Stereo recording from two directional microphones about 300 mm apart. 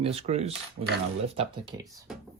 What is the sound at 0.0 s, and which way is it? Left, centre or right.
Speech, centre.